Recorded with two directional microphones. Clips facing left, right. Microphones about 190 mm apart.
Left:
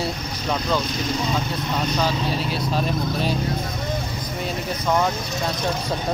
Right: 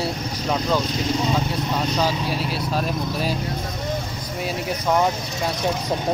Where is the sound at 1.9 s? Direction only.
5° right (ahead or behind).